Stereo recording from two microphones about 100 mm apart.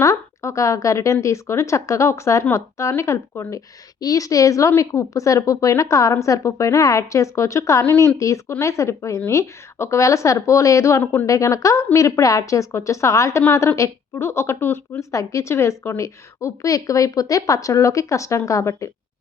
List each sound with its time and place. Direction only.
0.0 s a woman's voice: 30° left (ahead or behind)
11.3 s a woman's voice: 35° left (ahead or behind)